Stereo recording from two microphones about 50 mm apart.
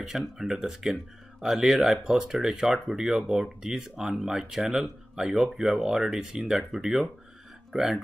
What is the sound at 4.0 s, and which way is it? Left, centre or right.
Speech, centre.